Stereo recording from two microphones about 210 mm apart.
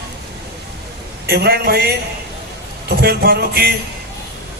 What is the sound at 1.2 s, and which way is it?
A man's voice, 50° right (ahead or behind).